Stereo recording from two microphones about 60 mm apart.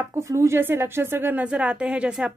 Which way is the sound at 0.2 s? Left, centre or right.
Right.